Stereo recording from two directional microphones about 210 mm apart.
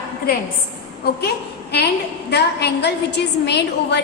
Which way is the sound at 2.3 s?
50° left (ahead or behind).